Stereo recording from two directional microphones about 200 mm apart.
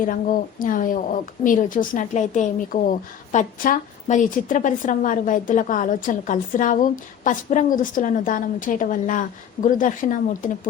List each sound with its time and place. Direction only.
0.0 s a woman's voice: 45° left (ahead or behind)